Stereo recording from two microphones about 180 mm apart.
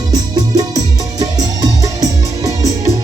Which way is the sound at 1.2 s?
20° right (ahead or behind).